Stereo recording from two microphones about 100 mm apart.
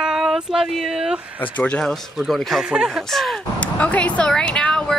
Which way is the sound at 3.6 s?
15° left (ahead or behind).